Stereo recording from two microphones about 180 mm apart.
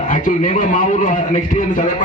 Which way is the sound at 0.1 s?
45° left (ahead or behind).